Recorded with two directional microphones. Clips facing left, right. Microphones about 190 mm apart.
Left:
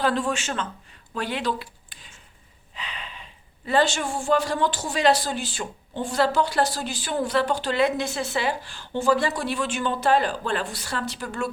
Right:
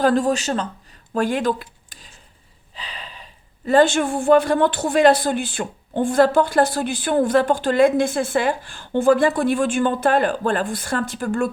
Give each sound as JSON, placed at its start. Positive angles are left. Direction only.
{"t": 0.0, "sound": "speech", "side_deg": -45}
{"t": 2.7, "sound": "snort", "side_deg": -35}
{"t": 3.7, "sound": "speech", "side_deg": -50}